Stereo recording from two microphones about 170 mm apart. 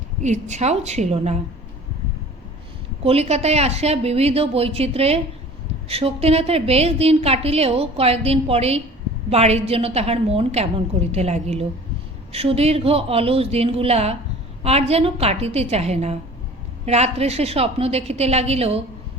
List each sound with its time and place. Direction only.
0.2 s a woman's voice: 45° right (ahead or behind)
3.0 s a woman's voice: 35° right (ahead or behind)